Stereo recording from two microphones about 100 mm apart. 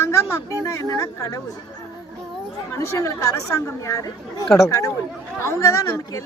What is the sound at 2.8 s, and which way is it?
Speech, 30° left (ahead or behind).